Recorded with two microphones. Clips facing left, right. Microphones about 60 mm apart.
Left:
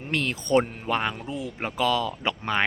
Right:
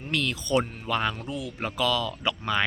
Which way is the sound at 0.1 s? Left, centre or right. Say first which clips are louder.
Left 3 dB; left.